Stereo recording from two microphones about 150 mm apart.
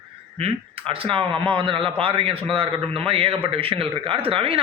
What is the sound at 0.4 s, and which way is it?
Speech, 35° right (ahead or behind).